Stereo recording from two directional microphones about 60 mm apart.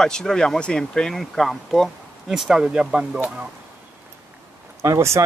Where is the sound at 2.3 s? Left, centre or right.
Centre.